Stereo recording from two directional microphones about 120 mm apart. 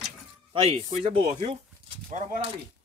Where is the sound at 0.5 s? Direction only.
55° right (ahead or behind).